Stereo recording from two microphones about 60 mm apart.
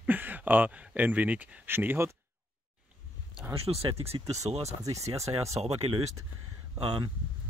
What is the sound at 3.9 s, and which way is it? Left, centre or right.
Speech, right.